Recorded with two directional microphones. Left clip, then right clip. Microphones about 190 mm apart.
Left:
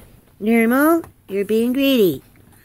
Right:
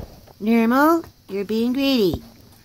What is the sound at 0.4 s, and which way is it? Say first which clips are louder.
Speech: left 1 dB; 5° left (ahead or behind).